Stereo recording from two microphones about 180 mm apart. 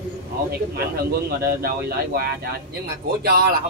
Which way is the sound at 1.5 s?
60° right (ahead or behind).